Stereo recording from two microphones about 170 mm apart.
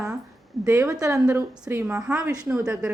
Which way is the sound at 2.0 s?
5° right (ahead or behind).